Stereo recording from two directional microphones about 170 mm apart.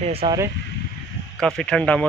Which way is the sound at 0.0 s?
35° right (ahead or behind).